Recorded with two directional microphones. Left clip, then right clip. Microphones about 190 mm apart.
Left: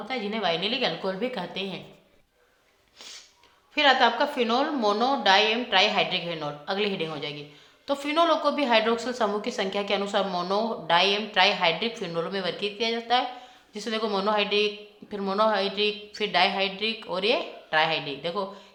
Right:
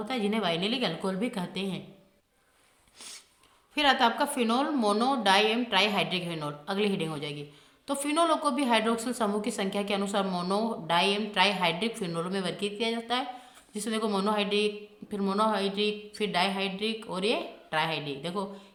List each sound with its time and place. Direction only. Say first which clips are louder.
0.0 s a woman's voice: left 2 dB; 30° right (ahead or behind)
3.8 s a woman's voice: left 4 dB; 20° right (ahead or behind)